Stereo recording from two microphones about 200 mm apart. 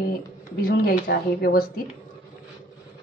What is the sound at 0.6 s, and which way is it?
Speech, 50° left (ahead or behind).